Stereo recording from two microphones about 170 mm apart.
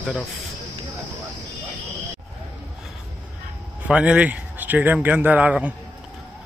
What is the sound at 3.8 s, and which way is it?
Speech, 5° right (ahead or behind).